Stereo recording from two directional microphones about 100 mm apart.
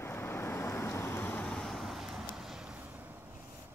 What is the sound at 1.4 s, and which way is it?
Vehicle, 5° left (ahead or behind).